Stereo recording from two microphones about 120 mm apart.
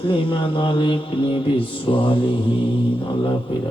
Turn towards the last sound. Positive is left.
turn(degrees=45)  # may be behind; listen again after turning